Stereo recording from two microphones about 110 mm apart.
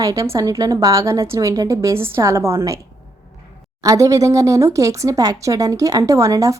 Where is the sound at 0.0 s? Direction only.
30° right (ahead or behind).